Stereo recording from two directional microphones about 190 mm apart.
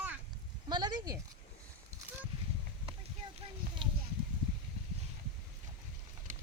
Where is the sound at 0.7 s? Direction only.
25° right (ahead or behind).